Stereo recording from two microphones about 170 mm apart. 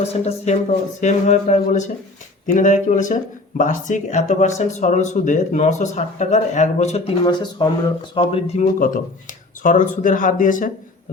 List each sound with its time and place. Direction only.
0.0 s speech: 35° left (ahead or behind)
9.6 s speech: 50° left (ahead or behind)